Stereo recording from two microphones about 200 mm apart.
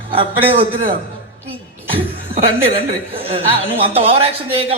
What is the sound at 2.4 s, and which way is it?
A woman's voice, 30° right (ahead or behind).